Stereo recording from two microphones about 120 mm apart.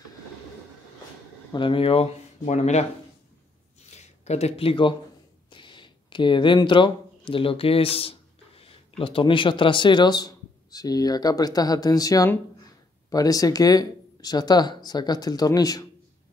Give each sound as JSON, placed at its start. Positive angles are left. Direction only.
{"t": 1.5, "sound": "speech", "side_deg": 45}
{"t": 2.4, "sound": "speech", "side_deg": 75}
{"t": 3.9, "sound": "speech", "side_deg": 70}